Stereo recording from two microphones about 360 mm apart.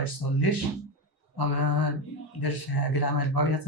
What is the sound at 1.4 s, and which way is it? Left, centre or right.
Speech, left.